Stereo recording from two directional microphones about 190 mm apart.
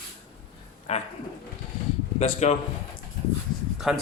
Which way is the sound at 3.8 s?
5° right (ahead or behind).